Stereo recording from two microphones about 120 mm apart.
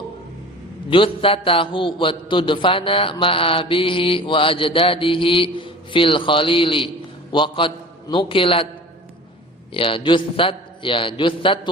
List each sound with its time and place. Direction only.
0.9 s a man's voice: 45° left (ahead or behind)
9.7 s a man's voice: 45° left (ahead or behind)